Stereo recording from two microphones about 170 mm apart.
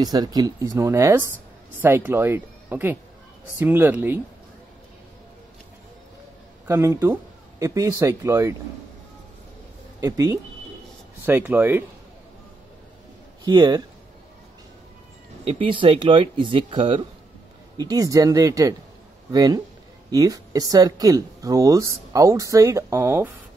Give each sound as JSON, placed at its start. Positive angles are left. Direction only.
{"t": 0.0, "sound": "speech", "side_deg": -25}
{"t": 6.7, "sound": "speech", "side_deg": -15}
{"t": 9.9, "sound": "speech", "side_deg": -20}
{"t": 13.4, "sound": "speech", "side_deg": -25}
{"t": 15.4, "sound": "speech", "side_deg": -30}